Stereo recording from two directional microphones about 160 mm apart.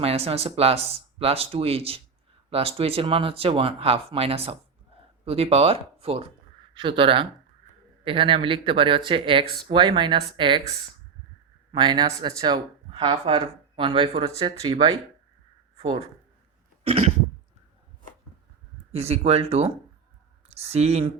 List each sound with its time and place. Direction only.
0.0 s speech: 40° right (ahead or behind)
11.7 s speech: 30° right (ahead or behind)
16.8 s cough: 40° right (ahead or behind)
18.9 s speech: 40° right (ahead or behind)